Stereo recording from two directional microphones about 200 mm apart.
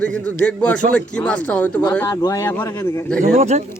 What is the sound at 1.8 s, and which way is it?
Speech, 20° left (ahead or behind).